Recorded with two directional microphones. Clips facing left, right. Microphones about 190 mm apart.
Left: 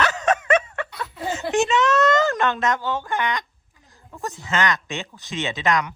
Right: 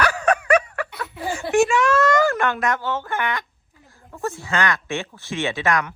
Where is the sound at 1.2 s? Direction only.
20° left (ahead or behind).